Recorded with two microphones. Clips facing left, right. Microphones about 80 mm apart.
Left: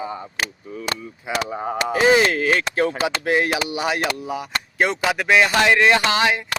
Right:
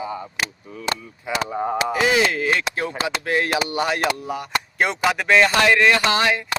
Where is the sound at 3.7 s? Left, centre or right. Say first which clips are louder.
Right 1 dB; centre.